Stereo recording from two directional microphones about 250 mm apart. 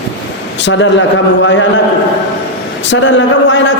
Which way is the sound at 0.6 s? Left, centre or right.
Left.